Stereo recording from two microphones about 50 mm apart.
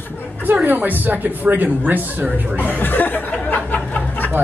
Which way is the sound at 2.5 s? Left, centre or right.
Left.